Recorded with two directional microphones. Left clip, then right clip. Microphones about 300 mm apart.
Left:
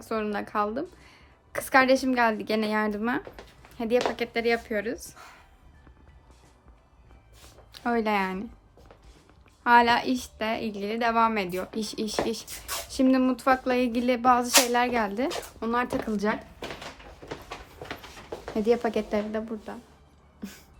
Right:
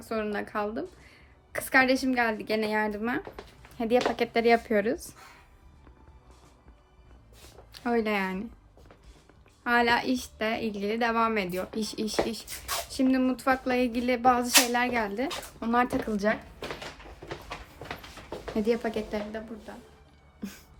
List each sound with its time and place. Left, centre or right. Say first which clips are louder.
0.0 s a woman's voice: left 1 dB; centre
4.1 s speech: right 3 dB; centre
7.7 s speech: left 2 dB; centre
9.6 s a woman's voice: left 4 dB; centre
18.5 s speech: left 3 dB; centre
18.9 s a woman's voice: left 4 dB; left
20.4 s a woman's voice: right 1 dB; centre